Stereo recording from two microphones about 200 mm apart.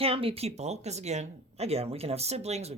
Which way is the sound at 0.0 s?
30° right (ahead or behind).